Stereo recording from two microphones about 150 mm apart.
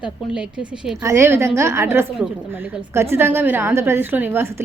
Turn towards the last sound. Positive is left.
turn(degrees=-15)  # may be behind; listen again after turning